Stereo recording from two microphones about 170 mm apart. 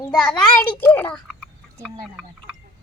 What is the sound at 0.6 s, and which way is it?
A child's voice, 10° left (ahead or behind).